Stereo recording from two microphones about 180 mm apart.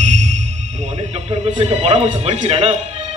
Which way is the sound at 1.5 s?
35° right (ahead or behind).